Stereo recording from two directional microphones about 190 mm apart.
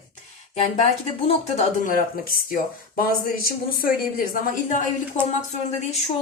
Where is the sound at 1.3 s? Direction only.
40° left (ahead or behind).